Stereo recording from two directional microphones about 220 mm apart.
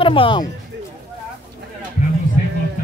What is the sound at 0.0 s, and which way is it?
Speech, 25° left (ahead or behind).